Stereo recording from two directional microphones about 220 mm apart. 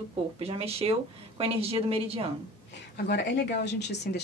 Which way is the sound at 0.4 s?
25° right (ahead or behind).